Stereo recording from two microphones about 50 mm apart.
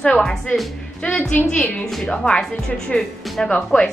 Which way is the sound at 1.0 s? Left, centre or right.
Left.